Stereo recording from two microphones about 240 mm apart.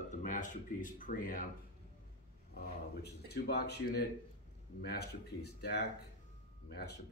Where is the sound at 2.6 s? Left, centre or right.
Left.